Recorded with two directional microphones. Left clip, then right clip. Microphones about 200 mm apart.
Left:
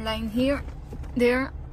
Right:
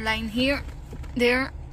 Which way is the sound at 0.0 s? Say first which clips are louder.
Right 2 dB; 10° left (ahead or behind).